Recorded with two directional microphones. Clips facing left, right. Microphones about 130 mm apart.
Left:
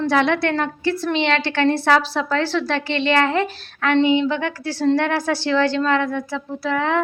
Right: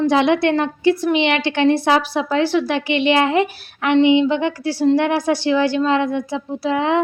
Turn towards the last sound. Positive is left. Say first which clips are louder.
# right 3 dB
turn(degrees=-20)  # may be behind; listen again after turning